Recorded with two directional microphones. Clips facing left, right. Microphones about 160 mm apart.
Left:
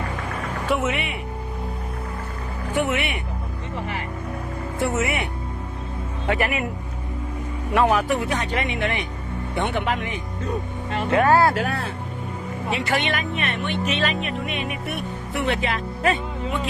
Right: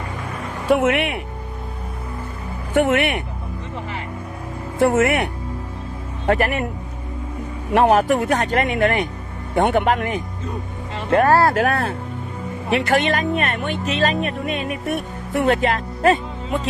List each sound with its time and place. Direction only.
0.7 s speech: 55° right (ahead or behind)
2.7 s speech: 55° right (ahead or behind)
4.8 s speech: 55° right (ahead or behind)
6.2 s speech: 45° right (ahead or behind)
7.7 s speech: 45° right (ahead or behind)
11.1 s speech: 35° right (ahead or behind)
11.6 s speech: 55° right (ahead or behind)
13.8 s speech: 40° right (ahead or behind)